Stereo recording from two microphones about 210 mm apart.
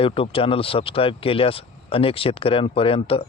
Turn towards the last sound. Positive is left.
turn(degrees=25)  # may be behind; listen again after turning